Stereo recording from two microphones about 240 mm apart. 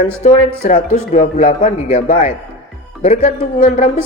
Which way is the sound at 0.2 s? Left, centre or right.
Left.